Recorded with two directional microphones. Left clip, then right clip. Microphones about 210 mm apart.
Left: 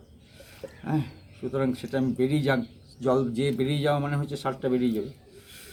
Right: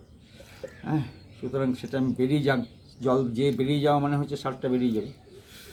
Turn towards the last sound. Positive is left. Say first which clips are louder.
# even
turn(degrees=5)  # may be behind; listen again after turning